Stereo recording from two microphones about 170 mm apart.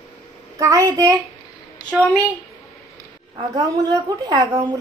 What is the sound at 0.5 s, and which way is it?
Speech, 20° right (ahead or behind).